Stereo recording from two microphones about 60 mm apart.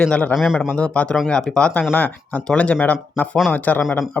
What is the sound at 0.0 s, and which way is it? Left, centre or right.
Speech, centre.